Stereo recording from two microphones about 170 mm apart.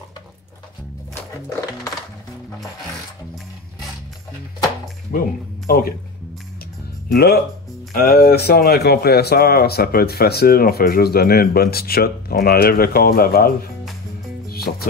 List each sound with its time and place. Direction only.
5.1 s speech: 55° left (ahead or behind)
7.1 s speech: 65° left (ahead or behind)
14.5 s music: 65° left (ahead or behind)